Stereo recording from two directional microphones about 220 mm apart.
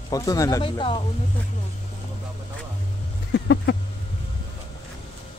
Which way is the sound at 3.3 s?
50° left (ahead or behind).